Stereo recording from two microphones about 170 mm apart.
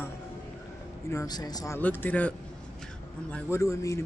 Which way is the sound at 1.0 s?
20° left (ahead or behind).